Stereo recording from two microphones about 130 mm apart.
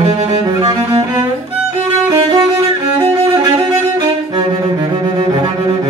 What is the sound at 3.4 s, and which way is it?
Music, 30° right (ahead or behind).